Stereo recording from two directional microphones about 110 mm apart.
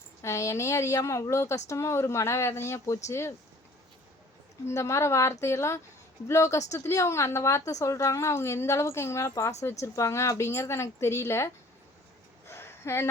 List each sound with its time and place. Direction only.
0.2 s a woman's voice: 25° left (ahead or behind)
4.6 s a woman's voice: 25° left (ahead or behind)
12.5 s a sound: 20° left (ahead or behind)